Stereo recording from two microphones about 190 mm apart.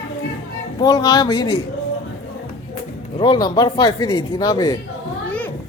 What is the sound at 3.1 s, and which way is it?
Speech, 25° left (ahead or behind).